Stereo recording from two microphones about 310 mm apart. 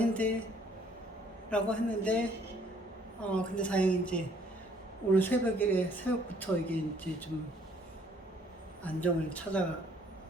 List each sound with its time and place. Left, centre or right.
0.0 s speech: centre
1.5 s a woman's voice: centre
8.8 s a woman's voice: centre